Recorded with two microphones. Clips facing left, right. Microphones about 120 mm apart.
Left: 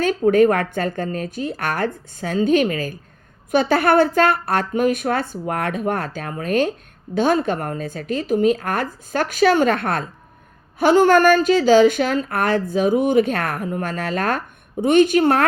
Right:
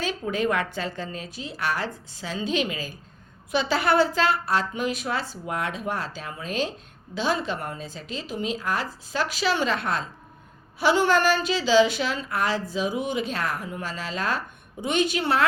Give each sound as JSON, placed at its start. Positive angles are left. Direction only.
{"t": 0.0, "sound": "speech", "side_deg": 50}